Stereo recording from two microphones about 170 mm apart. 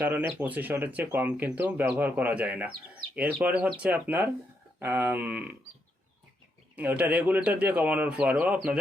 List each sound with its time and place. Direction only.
0.0 s speech: 10° right (ahead or behind)
6.7 s speech: 10° right (ahead or behind)